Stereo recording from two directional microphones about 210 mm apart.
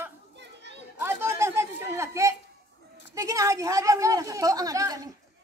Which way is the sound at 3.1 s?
15° right (ahead or behind).